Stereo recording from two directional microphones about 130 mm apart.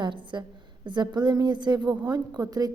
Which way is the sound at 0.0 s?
35° right (ahead or behind).